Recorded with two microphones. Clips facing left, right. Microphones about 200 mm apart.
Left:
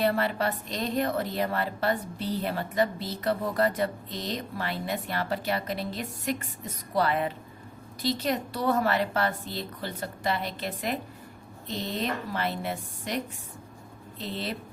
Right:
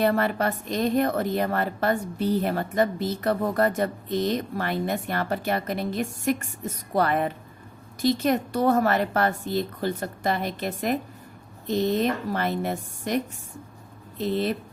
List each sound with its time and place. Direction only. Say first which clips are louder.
0.0 s a woman's voice: right 3 dB; 50° right (ahead or behind)
14.2 s a woman's voice: right 9 dB; 50° right (ahead or behind)